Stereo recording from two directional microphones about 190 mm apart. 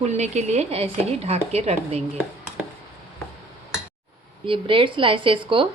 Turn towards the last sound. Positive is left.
turn(degrees=-25)  # may be behind; listen again after turning